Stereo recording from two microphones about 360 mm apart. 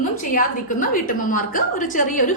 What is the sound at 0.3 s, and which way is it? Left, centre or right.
A woman's voice, left.